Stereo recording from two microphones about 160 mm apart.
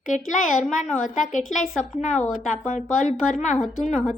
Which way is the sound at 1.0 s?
50° left (ahead or behind).